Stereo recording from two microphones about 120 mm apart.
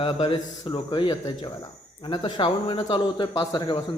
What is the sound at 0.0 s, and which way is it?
Speech, 50° left (ahead or behind).